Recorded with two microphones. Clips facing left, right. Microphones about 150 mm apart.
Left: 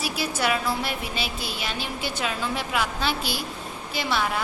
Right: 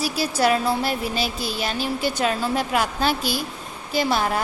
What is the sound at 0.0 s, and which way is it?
A woman's voice, 40° right (ahead or behind).